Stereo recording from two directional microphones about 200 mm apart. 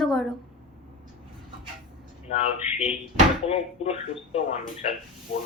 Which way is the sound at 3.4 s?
30° left (ahead or behind).